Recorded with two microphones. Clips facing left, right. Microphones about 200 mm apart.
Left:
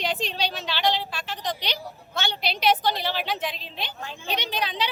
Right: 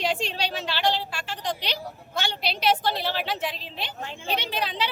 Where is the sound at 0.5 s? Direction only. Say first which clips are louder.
Right 1 dB; 5° right (ahead or behind).